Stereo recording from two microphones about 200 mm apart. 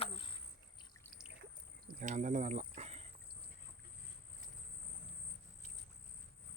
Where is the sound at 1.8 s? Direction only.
40° right (ahead or behind).